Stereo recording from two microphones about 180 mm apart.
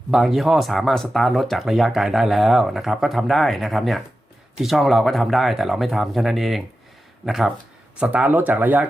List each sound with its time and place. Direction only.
0.1 s speech: centre (ahead or behind)